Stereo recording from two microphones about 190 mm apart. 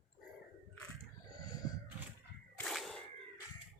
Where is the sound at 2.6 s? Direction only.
Centre (ahead or behind).